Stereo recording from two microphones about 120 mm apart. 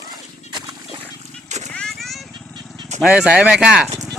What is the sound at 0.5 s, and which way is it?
Dog, 30° right (ahead or behind).